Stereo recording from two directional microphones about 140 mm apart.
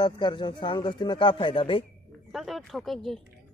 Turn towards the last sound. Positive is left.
turn(degrees=0)  # may be behind; listen again after turning